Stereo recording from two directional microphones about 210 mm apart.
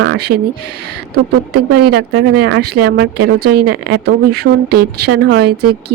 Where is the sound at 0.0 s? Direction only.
60° right (ahead or behind).